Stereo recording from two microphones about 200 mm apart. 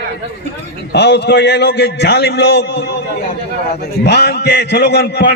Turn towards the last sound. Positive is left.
turn(degrees=55)  # may be behind; listen again after turning